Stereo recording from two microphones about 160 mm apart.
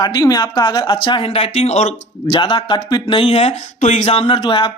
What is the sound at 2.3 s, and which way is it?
Speech, 30° left (ahead or behind).